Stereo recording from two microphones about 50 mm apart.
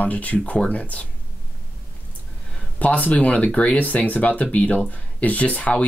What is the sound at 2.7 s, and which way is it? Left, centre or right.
Speech, left.